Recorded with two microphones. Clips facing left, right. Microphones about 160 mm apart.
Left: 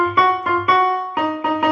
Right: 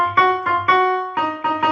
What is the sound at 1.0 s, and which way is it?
Music, 10° left (ahead or behind).